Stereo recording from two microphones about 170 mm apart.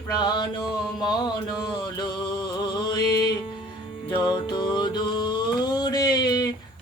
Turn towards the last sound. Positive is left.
turn(degrees=25)  # may be behind; listen again after turning